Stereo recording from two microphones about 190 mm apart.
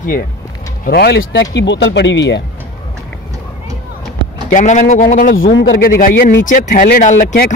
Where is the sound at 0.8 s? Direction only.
55° left (ahead or behind).